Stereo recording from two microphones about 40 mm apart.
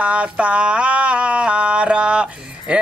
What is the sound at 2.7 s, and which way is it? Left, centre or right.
Music, right.